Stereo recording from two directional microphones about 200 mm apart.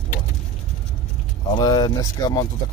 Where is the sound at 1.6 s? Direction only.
20° left (ahead or behind).